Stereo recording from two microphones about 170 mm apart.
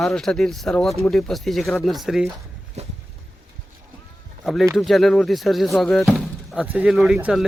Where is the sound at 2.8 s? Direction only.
40° right (ahead or behind).